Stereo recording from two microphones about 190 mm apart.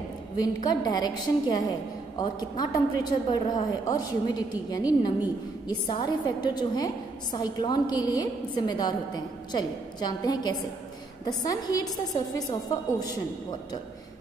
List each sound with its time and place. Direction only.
0.4 s a woman's voice: 20° left (ahead or behind)